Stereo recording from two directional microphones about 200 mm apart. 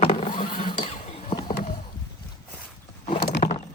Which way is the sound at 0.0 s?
30° left (ahead or behind).